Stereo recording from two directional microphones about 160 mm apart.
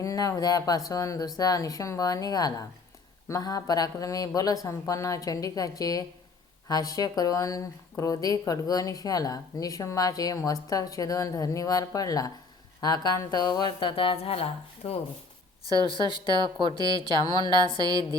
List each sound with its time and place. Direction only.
0.0 s speech: 20° left (ahead or behind); by 14.9 s 35° left (ahead or behind)
16.0 s speech: 30° left (ahead or behind)